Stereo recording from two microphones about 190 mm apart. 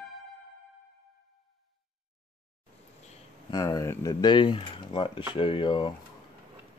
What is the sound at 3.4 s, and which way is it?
Speech, 20° left (ahead or behind).